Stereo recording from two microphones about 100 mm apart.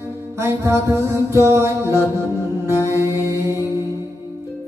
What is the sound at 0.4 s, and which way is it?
Music, 25° right (ahead or behind).